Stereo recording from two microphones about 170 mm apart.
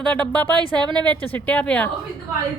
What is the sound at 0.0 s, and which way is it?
Speech, 5° left (ahead or behind).